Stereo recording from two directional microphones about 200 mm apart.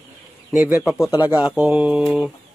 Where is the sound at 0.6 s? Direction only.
5° right (ahead or behind).